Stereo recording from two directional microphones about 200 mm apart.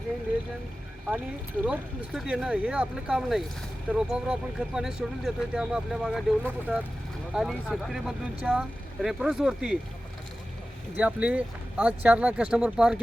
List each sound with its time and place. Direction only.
1.6 s speech: 5° right (ahead or behind)
10.9 s speech: 5° right (ahead or behind)